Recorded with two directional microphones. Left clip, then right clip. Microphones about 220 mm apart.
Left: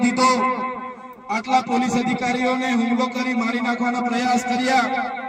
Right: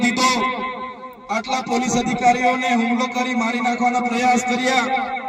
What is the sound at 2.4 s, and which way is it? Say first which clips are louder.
Speech: right 3 dB; 50° right (ahead or behind).